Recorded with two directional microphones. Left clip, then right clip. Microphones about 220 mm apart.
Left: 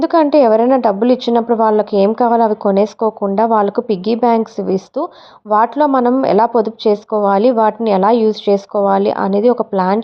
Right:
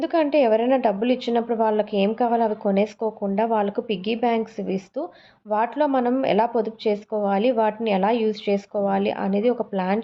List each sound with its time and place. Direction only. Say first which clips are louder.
0.0 s a woman's voice: left 9 dB; 30° left (ahead or behind)